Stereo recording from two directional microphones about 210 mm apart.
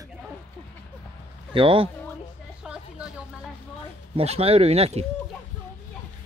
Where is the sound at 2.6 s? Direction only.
5° right (ahead or behind).